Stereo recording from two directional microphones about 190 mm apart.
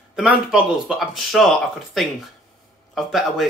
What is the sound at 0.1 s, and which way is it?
Speech, 5° right (ahead or behind).